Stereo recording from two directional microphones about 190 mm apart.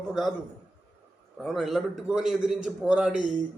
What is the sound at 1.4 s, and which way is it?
A man's voice, centre (ahead or behind).